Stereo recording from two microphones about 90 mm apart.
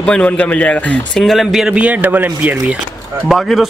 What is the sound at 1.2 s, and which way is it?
A man's voice, centre (ahead or behind).